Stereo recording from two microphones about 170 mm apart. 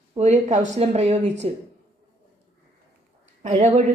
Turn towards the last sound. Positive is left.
turn(degrees=-40)  # may be behind; listen again after turning